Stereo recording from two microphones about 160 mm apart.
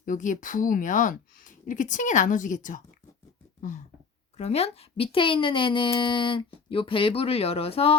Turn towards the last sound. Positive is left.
turn(degrees=35)  # may be behind; listen again after turning